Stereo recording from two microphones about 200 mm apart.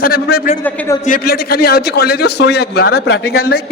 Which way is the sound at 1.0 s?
45° left (ahead or behind).